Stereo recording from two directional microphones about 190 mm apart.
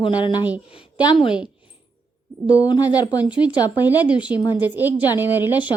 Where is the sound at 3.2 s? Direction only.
5° right (ahead or behind).